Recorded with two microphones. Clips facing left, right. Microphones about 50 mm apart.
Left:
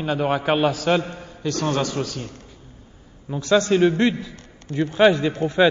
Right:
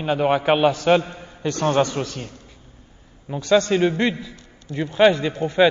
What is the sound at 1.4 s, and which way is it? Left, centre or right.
Speech, right.